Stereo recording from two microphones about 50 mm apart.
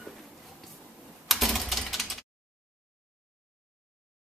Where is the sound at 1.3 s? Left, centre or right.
Centre.